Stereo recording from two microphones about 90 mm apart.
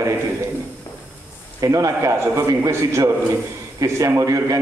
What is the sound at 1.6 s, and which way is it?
A man's voice, 40° right (ahead or behind).